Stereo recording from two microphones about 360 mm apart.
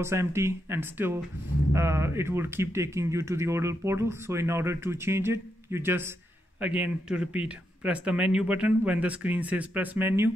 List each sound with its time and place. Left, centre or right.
0.0 s speech: centre